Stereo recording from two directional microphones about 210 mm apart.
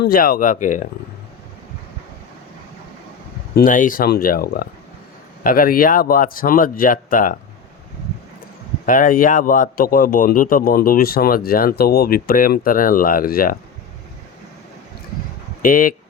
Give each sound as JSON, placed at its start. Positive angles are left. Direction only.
{"t": 0.0, "sound": "speech", "side_deg": 45}
{"t": 3.5, "sound": "a man's voice", "side_deg": 40}
{"t": 8.9, "sound": "a man's voice", "side_deg": 40}
{"t": 15.6, "sound": "speech", "side_deg": 40}